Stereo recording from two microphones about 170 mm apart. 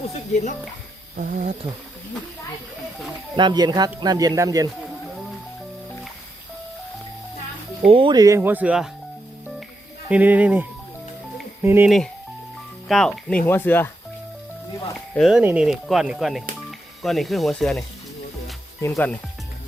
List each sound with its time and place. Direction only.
1.1 s speech: 55° right (ahead or behind)
3.3 s speech: 25° right (ahead or behind)
7.9 s speech: 30° right (ahead or behind); by 8.9 s 5° right (ahead or behind)
10.1 s speech: 10° right (ahead or behind)
12.9 s speech: 5° left (ahead or behind)
15.1 s speech: centre (ahead or behind)